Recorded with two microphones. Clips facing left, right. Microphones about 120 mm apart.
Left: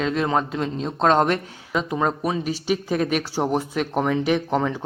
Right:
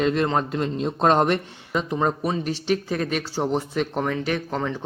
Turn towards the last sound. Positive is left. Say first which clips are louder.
# left 4 dB
turn(degrees=15)  # may be behind; listen again after turning